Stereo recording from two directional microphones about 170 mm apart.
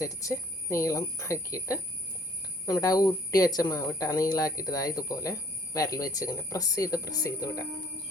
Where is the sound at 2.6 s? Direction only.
20° left (ahead or behind).